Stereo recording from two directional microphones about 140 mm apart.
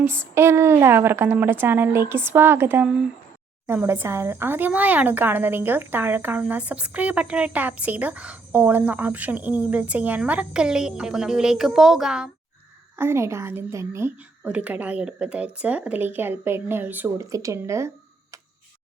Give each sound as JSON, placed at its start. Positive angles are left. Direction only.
{"t": 0.0, "sound": "a woman's voice", "side_deg": -15}
{"t": 13.0, "sound": "a woman's voice", "side_deg": -20}